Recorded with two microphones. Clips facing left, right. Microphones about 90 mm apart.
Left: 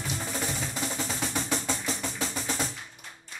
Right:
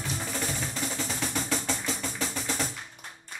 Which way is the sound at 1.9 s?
5° right (ahead or behind).